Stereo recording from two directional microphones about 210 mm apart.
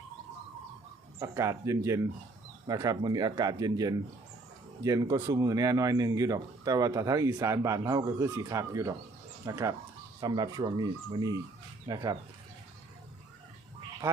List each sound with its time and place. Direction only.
1.2 s speech: 15° right (ahead or behind)